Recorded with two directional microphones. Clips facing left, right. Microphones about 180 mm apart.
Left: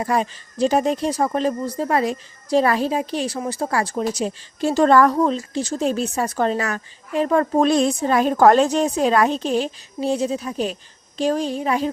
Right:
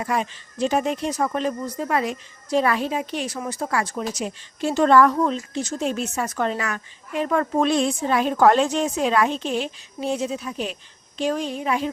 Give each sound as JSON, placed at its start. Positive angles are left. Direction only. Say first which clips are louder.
{"t": 0.0, "sound": "speech", "louder": "left 4 dB", "side_deg": 35}